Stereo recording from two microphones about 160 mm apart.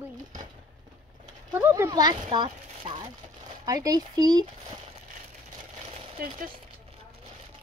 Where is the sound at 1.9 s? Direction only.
25° right (ahead or behind).